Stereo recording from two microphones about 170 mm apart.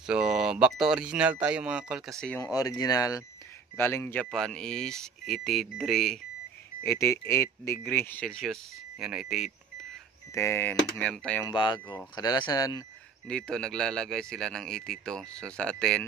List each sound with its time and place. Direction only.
0.0 s speech: 5° right (ahead or behind)
2.4 s speech: 20° left (ahead or behind); by 6.2 s centre (ahead or behind)
6.8 s speech: 15° left (ahead or behind); by 9.5 s 5° right (ahead or behind)
10.3 s speech: 15° left (ahead or behind)
11.4 s speech: 30° left (ahead or behind)
13.3 s speech: 5° left (ahead or behind)